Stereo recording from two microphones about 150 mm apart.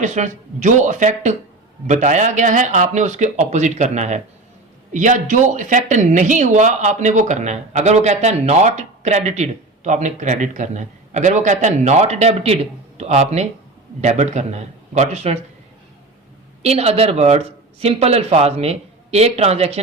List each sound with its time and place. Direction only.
0.0 s speech: 55° right (ahead or behind)
16.6 s speech: 45° right (ahead or behind)